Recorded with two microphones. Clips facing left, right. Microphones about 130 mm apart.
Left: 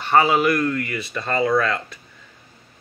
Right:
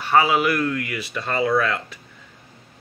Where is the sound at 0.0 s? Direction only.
5° right (ahead or behind).